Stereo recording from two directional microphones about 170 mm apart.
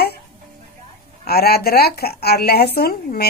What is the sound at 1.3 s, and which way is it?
Speech, 65° left (ahead or behind).